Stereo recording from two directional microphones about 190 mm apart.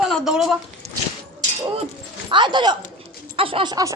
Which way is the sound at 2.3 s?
25° right (ahead or behind).